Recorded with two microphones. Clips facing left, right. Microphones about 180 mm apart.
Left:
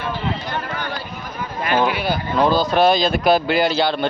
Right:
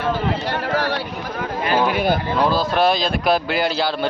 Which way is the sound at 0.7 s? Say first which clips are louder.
Right 6 dB; 85° right.